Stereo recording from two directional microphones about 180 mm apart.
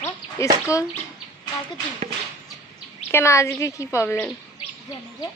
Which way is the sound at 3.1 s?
15° left (ahead or behind).